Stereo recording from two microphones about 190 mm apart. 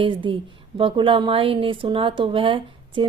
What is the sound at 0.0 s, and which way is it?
A woman's voice, 25° right (ahead or behind).